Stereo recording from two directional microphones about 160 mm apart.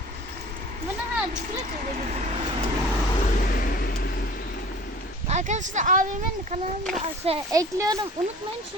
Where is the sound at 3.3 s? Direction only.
65° left (ahead or behind).